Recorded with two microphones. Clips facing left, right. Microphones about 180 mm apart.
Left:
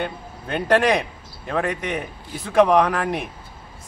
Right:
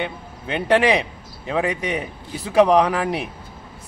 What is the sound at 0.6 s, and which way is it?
Speech, 5° right (ahead or behind).